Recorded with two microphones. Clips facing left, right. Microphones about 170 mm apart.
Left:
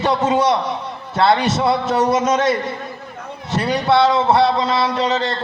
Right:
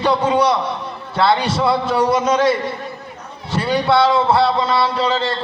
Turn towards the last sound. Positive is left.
turn(degrees=20)  # may be behind; listen again after turning